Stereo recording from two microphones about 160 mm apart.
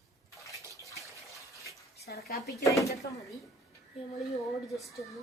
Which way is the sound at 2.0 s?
80° left.